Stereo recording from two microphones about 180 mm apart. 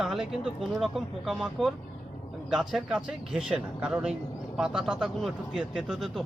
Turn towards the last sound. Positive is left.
turn(degrees=-5)  # may be behind; listen again after turning